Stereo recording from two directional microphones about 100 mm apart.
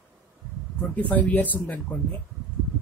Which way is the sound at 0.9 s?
15° left (ahead or behind).